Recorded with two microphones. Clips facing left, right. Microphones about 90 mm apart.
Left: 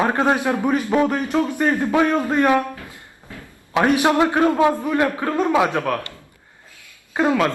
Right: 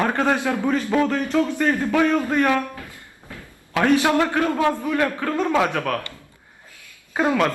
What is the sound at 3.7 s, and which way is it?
Speech, 20° left (ahead or behind).